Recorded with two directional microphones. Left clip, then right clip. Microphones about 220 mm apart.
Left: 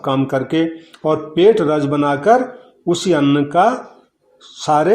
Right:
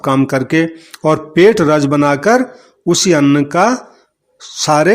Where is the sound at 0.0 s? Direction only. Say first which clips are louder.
Right 4 dB; 40° right (ahead or behind).